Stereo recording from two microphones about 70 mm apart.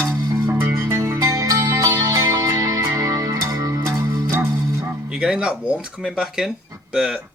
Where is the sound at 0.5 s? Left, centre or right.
Right.